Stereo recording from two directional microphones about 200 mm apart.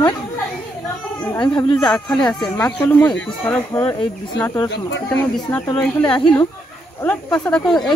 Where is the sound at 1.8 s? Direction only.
5° left (ahead or behind).